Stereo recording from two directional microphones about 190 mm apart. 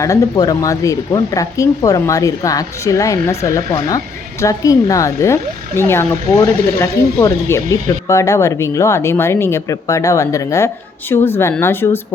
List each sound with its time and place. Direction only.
0.0 s speech: 20° left (ahead or behind)